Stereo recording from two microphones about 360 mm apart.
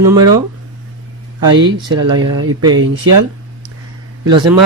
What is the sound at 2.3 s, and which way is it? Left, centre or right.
Mantra, right.